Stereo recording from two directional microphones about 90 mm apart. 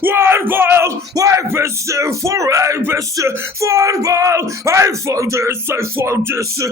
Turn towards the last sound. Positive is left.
turn(degrees=-30)  # may be behind; listen again after turning